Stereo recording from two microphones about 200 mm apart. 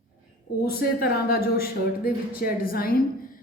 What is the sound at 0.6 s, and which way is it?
A woman's voice, 50° left (ahead or behind).